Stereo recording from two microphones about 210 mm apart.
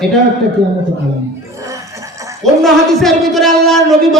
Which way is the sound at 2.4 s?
Centre (ahead or behind).